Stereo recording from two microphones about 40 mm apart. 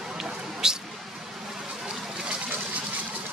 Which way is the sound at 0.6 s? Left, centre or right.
Centre.